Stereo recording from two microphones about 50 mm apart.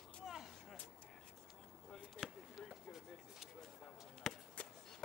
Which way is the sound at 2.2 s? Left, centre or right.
Centre.